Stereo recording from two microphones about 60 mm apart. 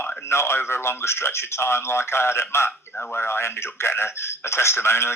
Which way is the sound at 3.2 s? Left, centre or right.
Left.